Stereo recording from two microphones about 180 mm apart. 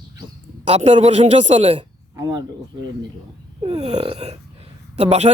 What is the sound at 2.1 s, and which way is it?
Speech, 20° right (ahead or behind).